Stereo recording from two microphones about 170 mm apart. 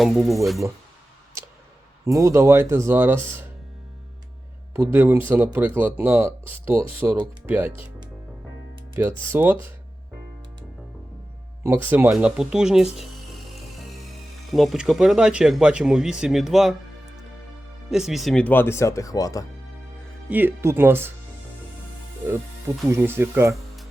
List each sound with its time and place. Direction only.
0.0 s speech: centre (ahead or behind)
2.0 s speech: 20° right (ahead or behind)
4.7 s speech: 15° right (ahead or behind)
9.0 s speech: 15° right (ahead or behind)
11.6 s speech: 15° right (ahead or behind)
14.5 s speech: centre (ahead or behind)
17.9 s speech: centre (ahead or behind); by 19.5 s 20° left (ahead or behind)
20.3 s speech: 15° right (ahead or behind)
22.3 s speech: 15° right (ahead or behind)